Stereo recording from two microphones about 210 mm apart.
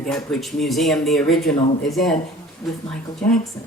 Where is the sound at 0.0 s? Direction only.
5° left (ahead or behind).